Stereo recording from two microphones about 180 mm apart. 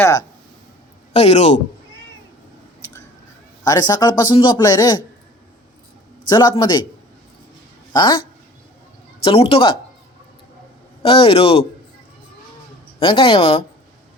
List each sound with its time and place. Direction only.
0.0 s a man's voice: 20° left (ahead or behind)
1.1 s a man's voice: 35° left (ahead or behind)
3.6 s a man's voice: 20° left (ahead or behind)
6.2 s a man's voice: 25° left (ahead or behind)
7.9 s a man's voice: 25° left (ahead or behind)
9.2 s a man's voice: 30° left (ahead or behind)
11.0 s a man's voice: 30° left (ahead or behind)
13.0 s a man's voice: 30° left (ahead or behind)